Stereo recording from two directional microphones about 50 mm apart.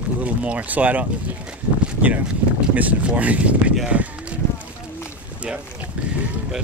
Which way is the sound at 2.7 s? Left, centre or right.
Right.